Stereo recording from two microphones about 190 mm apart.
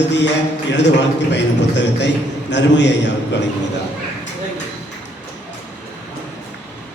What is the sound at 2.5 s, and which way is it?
Speech, 65° left (ahead or behind).